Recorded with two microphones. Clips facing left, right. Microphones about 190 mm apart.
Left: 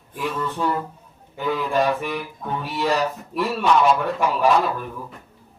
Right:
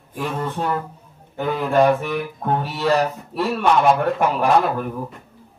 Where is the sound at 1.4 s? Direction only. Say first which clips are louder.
Right 4 dB; 55° right (ahead or behind).